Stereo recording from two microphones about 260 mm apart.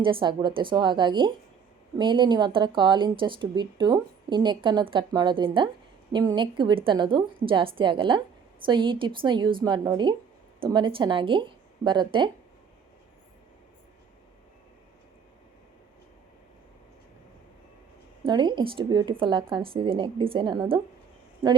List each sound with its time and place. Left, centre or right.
0.0 s a woman's voice: centre
18.3 s speech: centre